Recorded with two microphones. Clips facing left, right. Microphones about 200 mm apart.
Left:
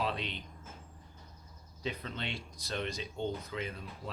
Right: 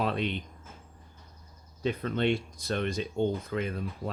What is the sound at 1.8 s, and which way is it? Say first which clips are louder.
Speech: right 11 dB; 55° right (ahead or behind).